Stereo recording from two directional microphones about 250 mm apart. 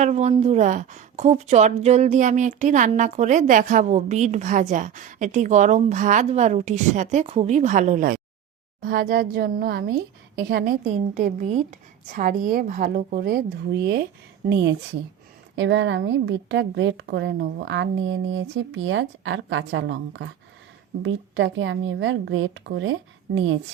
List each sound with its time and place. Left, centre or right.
0.0 s a woman's voice: right
14.5 s a woman's voice: right